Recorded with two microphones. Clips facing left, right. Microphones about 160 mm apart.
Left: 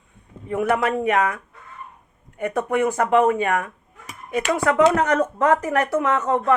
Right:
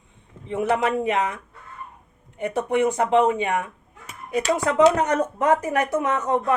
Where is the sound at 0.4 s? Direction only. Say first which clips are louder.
Left 1 dB; 25° right (ahead or behind).